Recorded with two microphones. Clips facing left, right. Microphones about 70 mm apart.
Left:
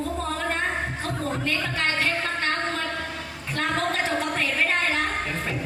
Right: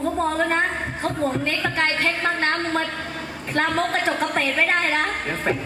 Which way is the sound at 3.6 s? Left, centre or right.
Right.